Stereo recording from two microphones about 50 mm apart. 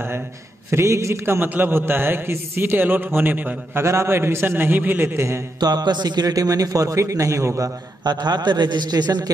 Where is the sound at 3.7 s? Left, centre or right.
Right.